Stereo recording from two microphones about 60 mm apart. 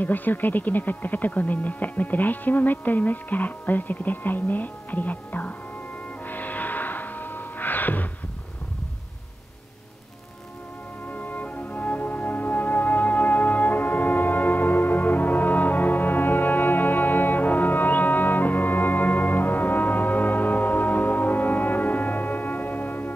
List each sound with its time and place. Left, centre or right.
0.0 s speech: left
6.2 s music: left
11.1 s music: left